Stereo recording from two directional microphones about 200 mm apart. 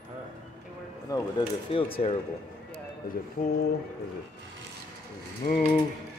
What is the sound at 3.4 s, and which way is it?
Ratchet, 50° left (ahead or behind).